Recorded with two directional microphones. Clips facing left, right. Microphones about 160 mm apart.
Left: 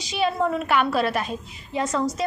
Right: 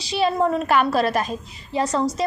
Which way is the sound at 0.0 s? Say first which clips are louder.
Right 3 dB; 35° right (ahead or behind).